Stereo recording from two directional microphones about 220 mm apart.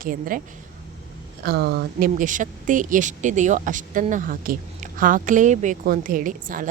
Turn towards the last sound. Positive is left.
turn(degrees=-40)  # may be behind; listen again after turning